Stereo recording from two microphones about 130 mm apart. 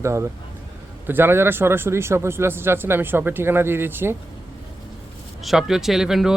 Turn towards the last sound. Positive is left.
turn(degrees=-5)  # may be behind; listen again after turning